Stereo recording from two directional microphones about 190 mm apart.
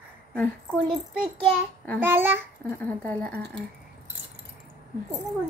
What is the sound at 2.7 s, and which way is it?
Speech, 10° left (ahead or behind).